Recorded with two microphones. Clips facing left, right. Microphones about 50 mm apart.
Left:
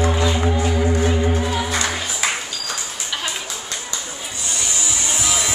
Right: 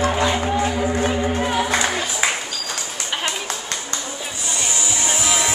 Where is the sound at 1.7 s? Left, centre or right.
Centre.